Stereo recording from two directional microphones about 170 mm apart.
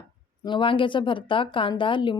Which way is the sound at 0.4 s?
30° left (ahead or behind).